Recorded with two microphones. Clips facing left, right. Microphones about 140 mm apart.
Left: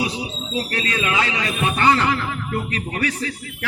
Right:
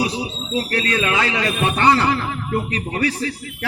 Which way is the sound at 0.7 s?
35° right (ahead or behind).